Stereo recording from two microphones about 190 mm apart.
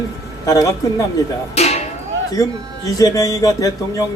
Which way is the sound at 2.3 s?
15° left (ahead or behind).